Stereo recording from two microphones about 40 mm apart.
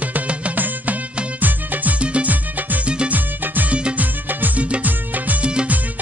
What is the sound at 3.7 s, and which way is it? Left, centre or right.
Music, right.